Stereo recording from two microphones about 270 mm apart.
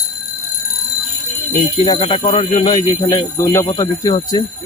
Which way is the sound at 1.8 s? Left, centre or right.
Centre.